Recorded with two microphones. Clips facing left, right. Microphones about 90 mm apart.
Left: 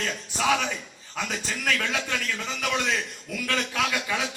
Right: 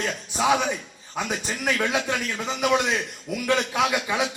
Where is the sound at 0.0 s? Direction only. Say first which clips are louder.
Right 3 dB; 20° right (ahead or behind).